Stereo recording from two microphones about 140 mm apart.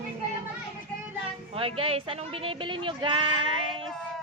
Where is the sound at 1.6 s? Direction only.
40° right (ahead or behind).